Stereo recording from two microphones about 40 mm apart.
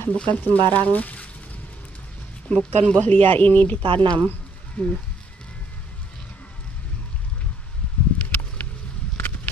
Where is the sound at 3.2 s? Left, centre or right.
Left.